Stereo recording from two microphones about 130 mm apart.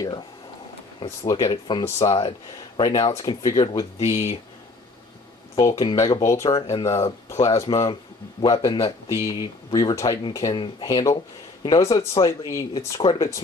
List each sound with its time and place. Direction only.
1.3 s speech: 40° left (ahead or behind)
2.8 s speech: 30° left (ahead or behind)
4.0 s speech: 55° left (ahead or behind)
5.6 s speech: 25° left (ahead or behind)